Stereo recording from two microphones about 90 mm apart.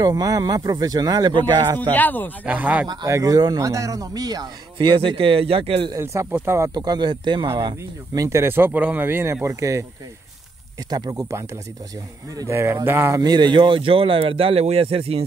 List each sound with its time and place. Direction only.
0.0 s speech: 45° right (ahead or behind)
1.8 s speech: 20° left (ahead or behind)
2.4 s speech: 15° right (ahead or behind)
3.1 s speech: 40° right (ahead or behind)
4.7 s speech: 70° right (ahead or behind); by 5.9 s 90° right
6.3 s speech: 30° right (ahead or behind)
6.7 s speech: 50° right (ahead or behind)
7.6 s speech: 40° right (ahead or behind)
10.9 s speech: 50° right (ahead or behind)
12.4 s speech: 30° right (ahead or behind)
13.2 s speech: 50° right (ahead or behind); by 15.2 s 90° right